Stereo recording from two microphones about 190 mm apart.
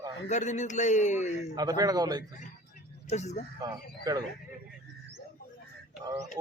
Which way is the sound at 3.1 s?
35° left (ahead or behind).